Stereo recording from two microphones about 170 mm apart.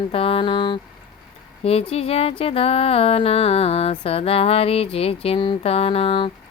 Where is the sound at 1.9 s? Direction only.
35° left (ahead or behind).